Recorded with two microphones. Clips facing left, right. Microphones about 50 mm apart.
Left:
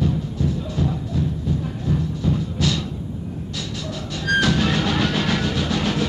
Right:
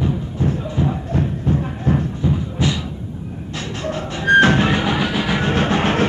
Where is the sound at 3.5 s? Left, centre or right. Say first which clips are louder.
Right 8 dB; right.